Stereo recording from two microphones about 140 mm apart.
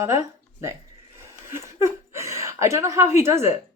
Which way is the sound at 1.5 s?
20° right (ahead or behind).